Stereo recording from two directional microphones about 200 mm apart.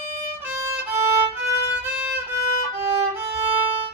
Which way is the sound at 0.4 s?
10° right (ahead or behind).